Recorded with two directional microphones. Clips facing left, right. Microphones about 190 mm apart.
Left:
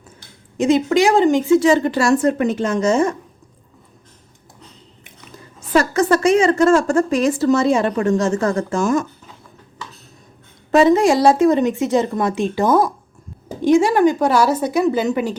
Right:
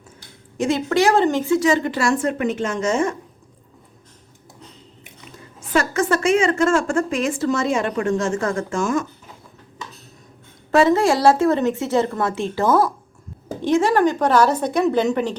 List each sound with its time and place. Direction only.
0.5 s a woman's voice: 20° left (ahead or behind)
1.5 s a woman's voice: 30° left (ahead or behind)
5.5 s a woman's voice: 35° left (ahead or behind)
10.7 s a woman's voice: 20° left (ahead or behind)